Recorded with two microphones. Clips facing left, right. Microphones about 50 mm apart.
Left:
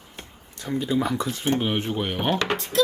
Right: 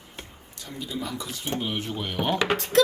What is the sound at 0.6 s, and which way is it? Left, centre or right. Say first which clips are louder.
Speech: left 9 dB; left.